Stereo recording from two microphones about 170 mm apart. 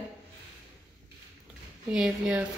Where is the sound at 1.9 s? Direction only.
5° right (ahead or behind).